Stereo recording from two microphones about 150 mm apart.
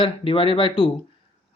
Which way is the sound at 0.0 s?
35° left (ahead or behind).